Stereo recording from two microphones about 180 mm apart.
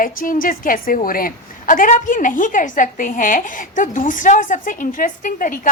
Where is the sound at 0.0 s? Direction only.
50° left (ahead or behind).